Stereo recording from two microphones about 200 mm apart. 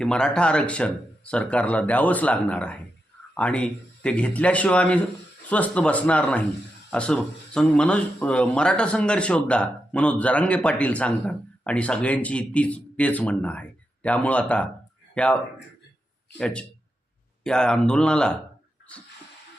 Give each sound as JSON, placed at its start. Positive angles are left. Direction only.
{"t": 0.0, "sound": "a man's voice", "side_deg": 5}
{"t": 16.4, "sound": "speech", "side_deg": 5}